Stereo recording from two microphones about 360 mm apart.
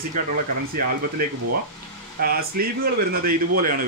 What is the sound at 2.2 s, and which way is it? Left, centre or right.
Speech, right.